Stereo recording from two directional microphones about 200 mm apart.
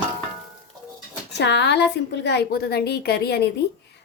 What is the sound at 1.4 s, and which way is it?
A woman's voice, 60° left (ahead or behind).